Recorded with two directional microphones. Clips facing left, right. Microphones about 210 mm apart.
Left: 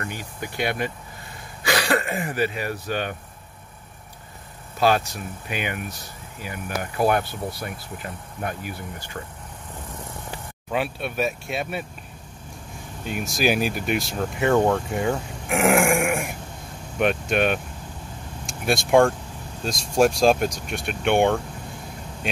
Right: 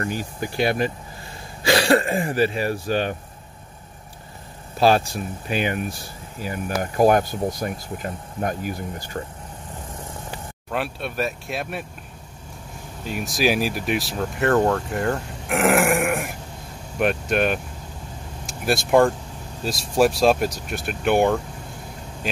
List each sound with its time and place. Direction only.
0.0 s speech: 35° right (ahead or behind)
4.7 s speech: 30° right (ahead or behind)
10.7 s speech: centre (ahead or behind)
13.0 s speech: centre (ahead or behind)